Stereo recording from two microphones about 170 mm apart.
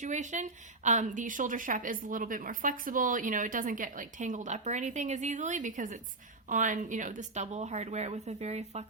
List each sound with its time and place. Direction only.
0.0 s a woman's voice: 45° right (ahead or behind)